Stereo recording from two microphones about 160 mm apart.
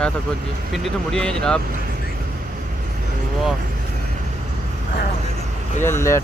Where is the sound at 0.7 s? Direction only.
Centre (ahead or behind).